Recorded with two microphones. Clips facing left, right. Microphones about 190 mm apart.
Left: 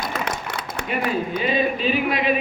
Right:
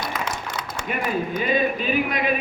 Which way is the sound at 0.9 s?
50° right (ahead or behind).